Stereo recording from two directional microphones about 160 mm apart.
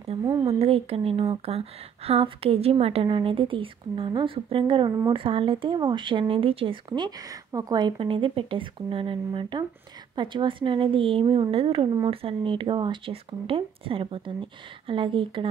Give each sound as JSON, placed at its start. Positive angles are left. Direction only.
{"t": 0.2, "sound": "speech", "side_deg": -25}
{"t": 0.5, "sound": "speech", "side_deg": -40}